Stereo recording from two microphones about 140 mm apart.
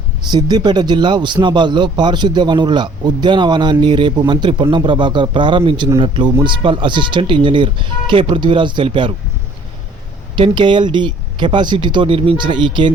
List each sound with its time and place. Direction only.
0.3 s speech: 30° right (ahead or behind)
10.3 s speech: 35° right (ahead or behind)